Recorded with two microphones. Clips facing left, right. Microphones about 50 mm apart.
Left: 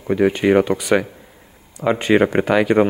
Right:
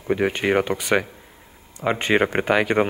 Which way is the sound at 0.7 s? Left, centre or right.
Right.